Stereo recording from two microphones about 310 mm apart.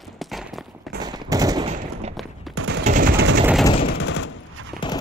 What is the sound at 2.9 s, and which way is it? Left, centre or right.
Mechanisms, right.